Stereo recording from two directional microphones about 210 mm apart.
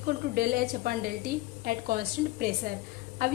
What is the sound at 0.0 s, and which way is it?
A woman's voice, 45° right (ahead or behind).